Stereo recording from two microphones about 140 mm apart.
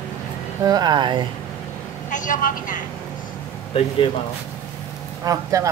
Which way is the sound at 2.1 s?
70° left (ahead or behind).